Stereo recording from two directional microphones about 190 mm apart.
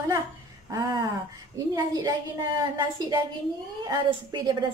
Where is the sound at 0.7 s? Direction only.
20° right (ahead or behind).